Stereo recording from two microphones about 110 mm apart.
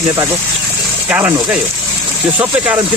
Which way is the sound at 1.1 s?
15° right (ahead or behind).